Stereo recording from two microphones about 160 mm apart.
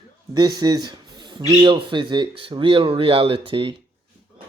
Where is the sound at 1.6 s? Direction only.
30° right (ahead or behind).